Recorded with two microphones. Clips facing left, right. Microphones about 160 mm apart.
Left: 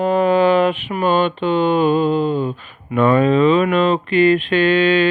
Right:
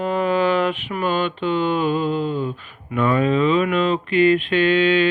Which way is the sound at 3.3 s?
75° left (ahead or behind).